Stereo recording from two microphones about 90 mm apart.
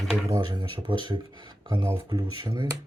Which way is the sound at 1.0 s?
55° right (ahead or behind).